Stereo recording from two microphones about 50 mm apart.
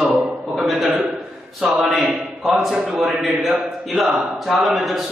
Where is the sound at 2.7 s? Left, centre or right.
Centre.